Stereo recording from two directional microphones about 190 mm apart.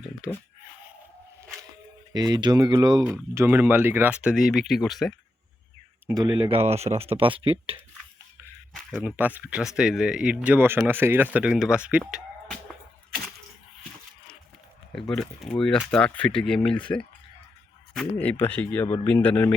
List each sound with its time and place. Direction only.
2.1 s speech: 20° right (ahead or behind)
3.0 s speech: 5° right (ahead or behind)
6.1 s speech: 20° right (ahead or behind)
9.0 s speech: 10° right (ahead or behind)
15.1 s speech: 5° left (ahead or behind)